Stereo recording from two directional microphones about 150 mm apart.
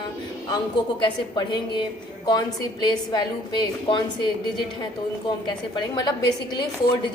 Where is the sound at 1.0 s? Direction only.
30° left (ahead or behind).